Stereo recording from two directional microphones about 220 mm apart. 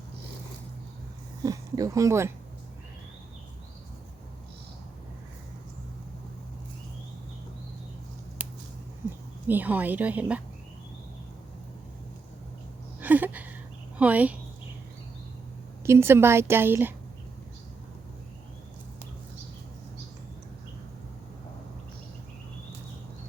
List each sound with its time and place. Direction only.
1.4 s speech: 15° right (ahead or behind)
8.4 s a sound: 5° right (ahead or behind)
9.5 s a woman's voice: 10° right (ahead or behind)
13.0 s a sound: 10° right (ahead or behind)
14.0 s a woman's voice: 5° right (ahead or behind)
15.9 s a woman's voice: 10° right (ahead or behind)